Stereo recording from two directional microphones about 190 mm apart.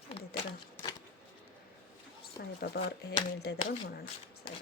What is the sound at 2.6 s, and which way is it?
Speech, 55° left (ahead or behind).